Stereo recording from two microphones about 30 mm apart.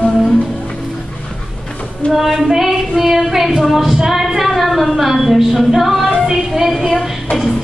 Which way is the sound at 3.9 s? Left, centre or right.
Centre.